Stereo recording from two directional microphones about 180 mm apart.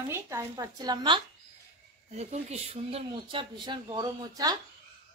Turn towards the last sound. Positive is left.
turn(degrees=-20)  # may be behind; listen again after turning